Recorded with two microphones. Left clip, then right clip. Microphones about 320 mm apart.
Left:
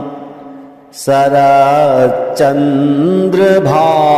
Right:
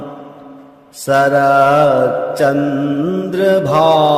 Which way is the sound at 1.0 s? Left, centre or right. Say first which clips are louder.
Left 3 dB; centre.